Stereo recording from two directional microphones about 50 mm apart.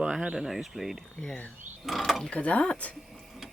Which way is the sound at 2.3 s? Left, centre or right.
Left.